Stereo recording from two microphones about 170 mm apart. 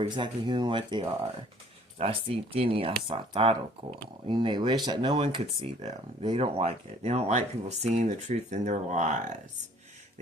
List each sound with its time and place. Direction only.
0.0 s speech: 25° right (ahead or behind); by 9.1 s 45° right (ahead or behind)